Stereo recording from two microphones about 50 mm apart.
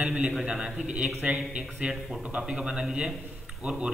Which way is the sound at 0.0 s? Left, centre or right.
Right.